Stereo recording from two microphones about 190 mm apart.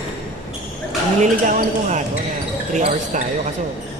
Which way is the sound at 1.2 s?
40° right (ahead or behind).